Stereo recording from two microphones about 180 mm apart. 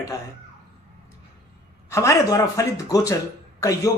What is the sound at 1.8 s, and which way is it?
A man's voice, 15° left (ahead or behind).